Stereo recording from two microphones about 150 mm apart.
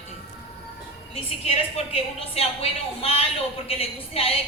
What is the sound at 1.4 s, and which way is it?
A woman's voice, 40° left (ahead or behind).